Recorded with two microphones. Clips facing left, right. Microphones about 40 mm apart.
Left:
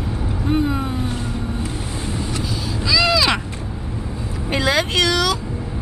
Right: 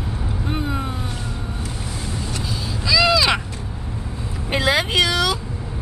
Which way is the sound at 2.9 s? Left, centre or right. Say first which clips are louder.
Even; centre.